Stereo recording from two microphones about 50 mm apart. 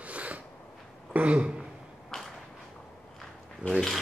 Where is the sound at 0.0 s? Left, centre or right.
Right.